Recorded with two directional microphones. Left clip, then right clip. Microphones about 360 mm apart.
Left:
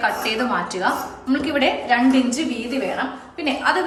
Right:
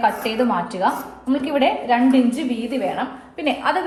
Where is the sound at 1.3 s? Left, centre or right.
Centre.